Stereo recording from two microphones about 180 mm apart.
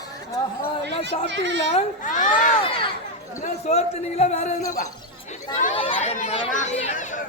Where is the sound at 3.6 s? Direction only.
35° left (ahead or behind).